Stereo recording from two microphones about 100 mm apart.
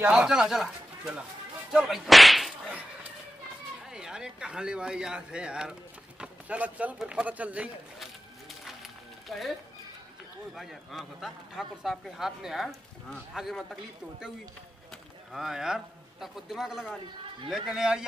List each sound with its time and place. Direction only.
0.1 s speech: 5° right (ahead or behind)
1.7 s whip: 5° right (ahead or behind)
3.9 s speech: 5° right (ahead or behind)
9.3 s a man's voice: centre (ahead or behind)
10.5 s a man's voice: centre (ahead or behind)
15.3 s a man's voice: 5° right (ahead or behind)